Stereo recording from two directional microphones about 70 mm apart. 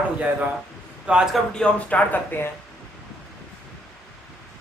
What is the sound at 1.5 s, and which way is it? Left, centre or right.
Speech, centre.